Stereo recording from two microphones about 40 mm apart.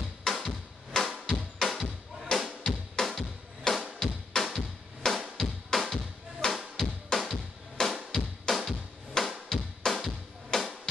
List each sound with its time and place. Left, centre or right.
0.2 s a sound: centre
1.0 s music: centre
2.6 s drum: centre
4.0 s music: centre
5.0 s drum: centre
5.4 s music: centre